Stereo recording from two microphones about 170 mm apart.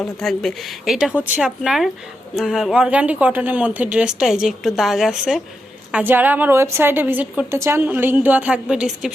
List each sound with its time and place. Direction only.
0.0 s a woman's voice: centre (ahead or behind)